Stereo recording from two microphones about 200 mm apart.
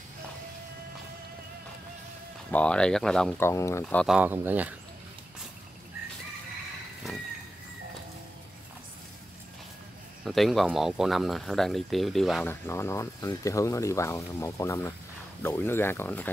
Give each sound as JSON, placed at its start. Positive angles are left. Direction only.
{"t": 2.5, "sound": "speech", "side_deg": 5}
{"t": 3.8, "sound": "speech", "side_deg": 0}
{"t": 4.2, "sound": "speech", "side_deg": -10}
{"t": 10.2, "sound": "speech", "side_deg": 0}
{"t": 12.6, "sound": "speech", "side_deg": 15}